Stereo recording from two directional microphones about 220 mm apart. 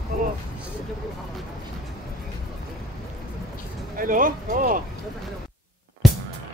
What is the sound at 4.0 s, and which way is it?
Speech, 40° right (ahead or behind).